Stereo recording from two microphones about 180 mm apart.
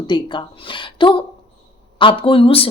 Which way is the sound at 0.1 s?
25° left (ahead or behind).